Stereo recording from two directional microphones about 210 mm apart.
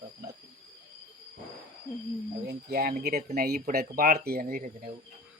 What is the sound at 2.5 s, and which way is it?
Speech, 50° right (ahead or behind).